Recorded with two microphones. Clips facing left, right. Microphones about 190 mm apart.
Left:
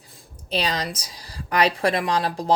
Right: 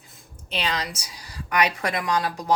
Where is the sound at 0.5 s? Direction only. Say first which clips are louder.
Left 3 dB; 35° left (ahead or behind).